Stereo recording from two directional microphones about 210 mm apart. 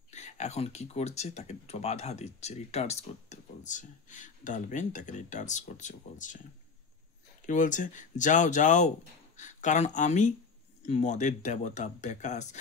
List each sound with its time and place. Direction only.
0.1 s speech: 35° left (ahead or behind)
7.4 s speech: 40° left (ahead or behind)